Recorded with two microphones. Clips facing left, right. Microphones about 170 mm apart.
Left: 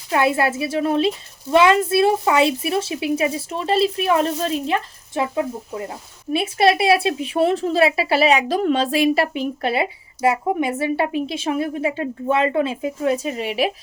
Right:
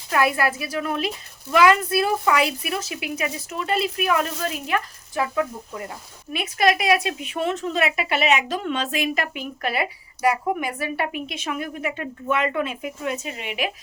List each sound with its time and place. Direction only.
0.1 s a woman's voice: 25° left (ahead or behind)